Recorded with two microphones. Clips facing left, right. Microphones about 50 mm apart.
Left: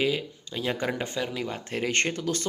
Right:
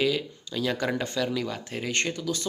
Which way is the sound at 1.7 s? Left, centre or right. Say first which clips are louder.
Left 2 dB; left.